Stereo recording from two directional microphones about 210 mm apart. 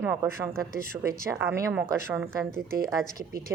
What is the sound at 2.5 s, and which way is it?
Speech, 45° right (ahead or behind).